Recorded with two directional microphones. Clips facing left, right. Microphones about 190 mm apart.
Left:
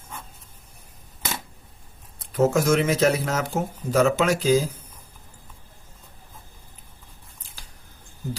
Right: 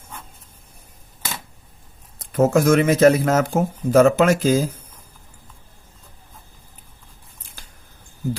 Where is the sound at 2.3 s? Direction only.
55° right (ahead or behind).